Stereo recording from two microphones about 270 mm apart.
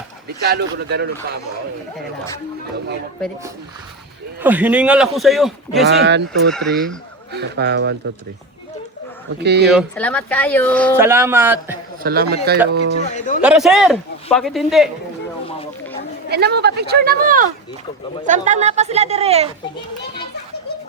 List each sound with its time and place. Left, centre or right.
0.4 s speech: right
4.4 s a man's voice: centre
5.8 s speech: right
6.5 s a man's voice: centre
7.3 s speech: right
9.4 s speech: right
9.7 s a man's voice: centre
10.9 s speech: centre
12.0 s speech: right
13.1 s speech: left
13.4 s a man's voice: centre
16.3 s speech: right